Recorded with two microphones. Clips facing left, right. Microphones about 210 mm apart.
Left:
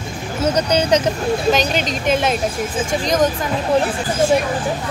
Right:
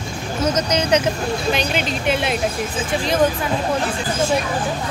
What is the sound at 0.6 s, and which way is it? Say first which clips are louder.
Speech: left 3 dB; 35° left (ahead or behind).